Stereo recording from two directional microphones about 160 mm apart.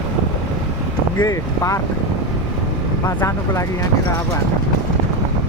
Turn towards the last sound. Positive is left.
turn(degrees=20)  # may be behind; listen again after turning